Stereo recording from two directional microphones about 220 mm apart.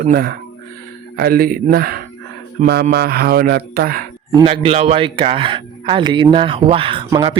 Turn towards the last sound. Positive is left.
turn(degrees=-20)  # may be behind; listen again after turning